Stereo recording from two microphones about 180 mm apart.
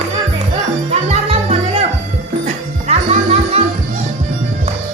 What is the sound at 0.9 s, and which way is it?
Music, 35° right (ahead or behind).